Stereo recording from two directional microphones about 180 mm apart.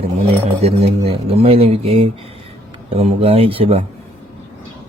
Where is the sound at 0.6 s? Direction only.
35° right (ahead or behind).